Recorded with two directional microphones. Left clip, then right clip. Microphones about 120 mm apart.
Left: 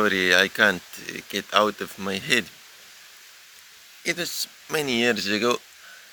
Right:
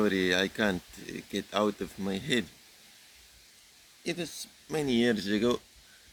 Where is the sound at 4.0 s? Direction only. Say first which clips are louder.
Left 9 dB; 15° right (ahead or behind).